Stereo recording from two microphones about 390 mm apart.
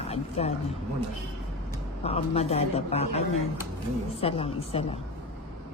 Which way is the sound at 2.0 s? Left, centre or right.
Centre.